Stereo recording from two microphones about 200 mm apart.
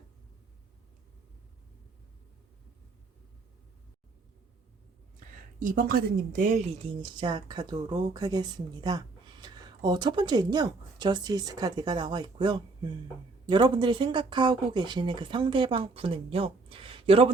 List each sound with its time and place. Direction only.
5.5 s a woman's voice: 40° right (ahead or behind)